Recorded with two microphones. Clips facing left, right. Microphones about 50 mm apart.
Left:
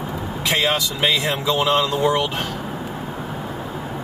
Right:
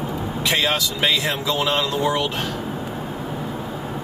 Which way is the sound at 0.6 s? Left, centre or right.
Left.